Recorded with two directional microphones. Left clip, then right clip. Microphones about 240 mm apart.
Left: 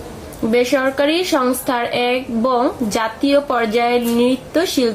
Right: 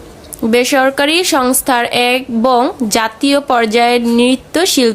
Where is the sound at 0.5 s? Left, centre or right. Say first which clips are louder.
Right 5 dB; right.